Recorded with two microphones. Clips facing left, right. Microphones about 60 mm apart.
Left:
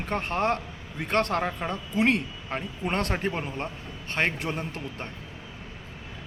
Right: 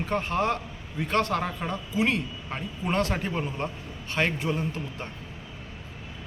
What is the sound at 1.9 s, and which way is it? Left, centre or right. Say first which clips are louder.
Speech: left 2 dB; left.